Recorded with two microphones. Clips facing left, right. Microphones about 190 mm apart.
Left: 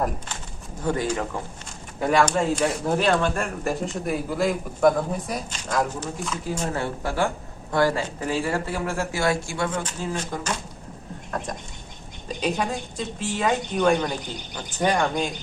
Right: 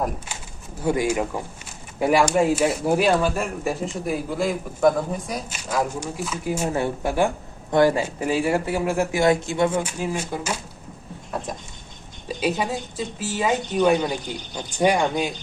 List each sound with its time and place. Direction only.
0.8 s a woman's voice: 10° right (ahead or behind)
9.6 s a woman's voice: 10° right (ahead or behind)
12.4 s a woman's voice: 5° right (ahead or behind)